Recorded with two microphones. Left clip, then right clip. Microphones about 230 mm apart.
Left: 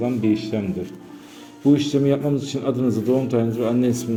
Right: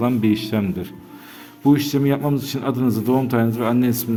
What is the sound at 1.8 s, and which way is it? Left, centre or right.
A man's voice, right.